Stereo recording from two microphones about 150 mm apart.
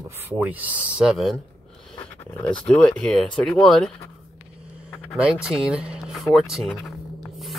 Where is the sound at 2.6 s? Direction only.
5° left (ahead or behind).